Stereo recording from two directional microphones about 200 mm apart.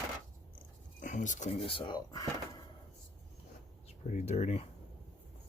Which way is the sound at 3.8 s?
35° left (ahead or behind).